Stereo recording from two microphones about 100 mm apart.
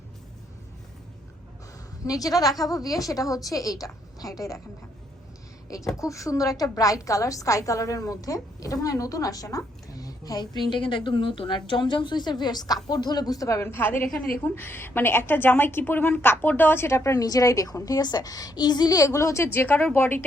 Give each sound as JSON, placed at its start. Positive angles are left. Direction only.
{"t": 2.0, "sound": "a woman's voice", "side_deg": 35}
{"t": 5.6, "sound": "a woman's voice", "side_deg": 35}